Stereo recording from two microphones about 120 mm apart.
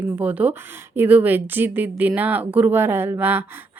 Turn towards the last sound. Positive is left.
turn(degrees=-15)  # may be behind; listen again after turning